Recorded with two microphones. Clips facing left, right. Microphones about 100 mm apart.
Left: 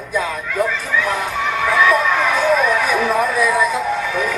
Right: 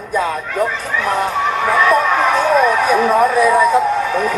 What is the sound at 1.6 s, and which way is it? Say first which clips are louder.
Speech: right 1 dB; 45° right (ahead or behind).